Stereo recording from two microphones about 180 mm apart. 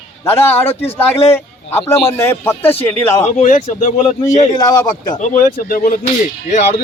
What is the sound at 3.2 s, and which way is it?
Speech, 45° left (ahead or behind).